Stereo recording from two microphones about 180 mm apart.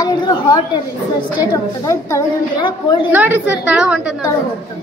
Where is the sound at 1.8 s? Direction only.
15° left (ahead or behind).